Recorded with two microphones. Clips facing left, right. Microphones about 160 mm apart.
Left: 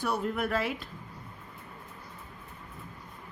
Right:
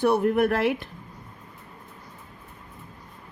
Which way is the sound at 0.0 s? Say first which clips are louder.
Right 10 dB; 60° right (ahead or behind).